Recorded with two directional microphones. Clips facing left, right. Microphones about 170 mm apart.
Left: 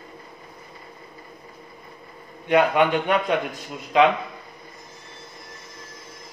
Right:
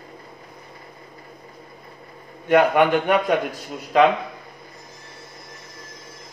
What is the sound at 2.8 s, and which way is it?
A man's voice, 45° right (ahead or behind).